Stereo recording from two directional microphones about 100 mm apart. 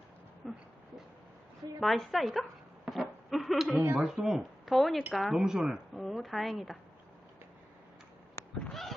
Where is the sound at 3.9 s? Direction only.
5° right (ahead or behind).